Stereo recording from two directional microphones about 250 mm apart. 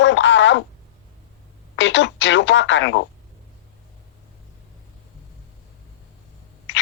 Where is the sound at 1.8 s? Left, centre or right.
Left.